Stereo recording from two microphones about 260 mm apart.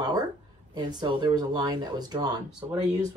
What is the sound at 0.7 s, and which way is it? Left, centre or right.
Speech, centre.